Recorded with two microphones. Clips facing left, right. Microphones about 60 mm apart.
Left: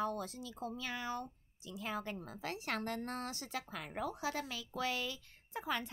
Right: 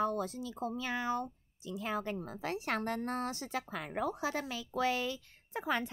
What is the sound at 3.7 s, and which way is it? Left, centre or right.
A woman's voice, right.